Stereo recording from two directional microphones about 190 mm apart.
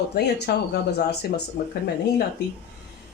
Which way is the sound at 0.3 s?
60° left (ahead or behind).